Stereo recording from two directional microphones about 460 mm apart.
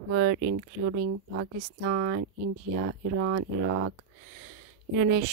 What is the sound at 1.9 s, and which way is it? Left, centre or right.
Speech, right.